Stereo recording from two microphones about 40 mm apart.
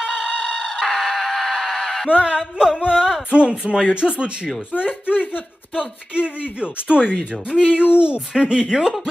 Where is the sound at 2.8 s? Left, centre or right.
Right.